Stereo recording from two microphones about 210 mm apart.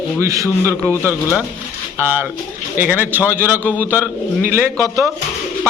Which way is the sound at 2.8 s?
10° right (ahead or behind).